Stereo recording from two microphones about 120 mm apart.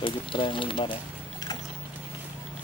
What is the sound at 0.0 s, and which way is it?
Speech, 45° left (ahead or behind).